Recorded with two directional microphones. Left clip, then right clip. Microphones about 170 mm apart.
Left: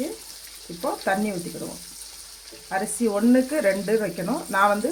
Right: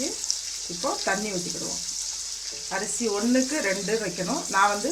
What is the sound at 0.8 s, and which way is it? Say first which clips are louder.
Frying: left 2 dB; 50° left (ahead or behind).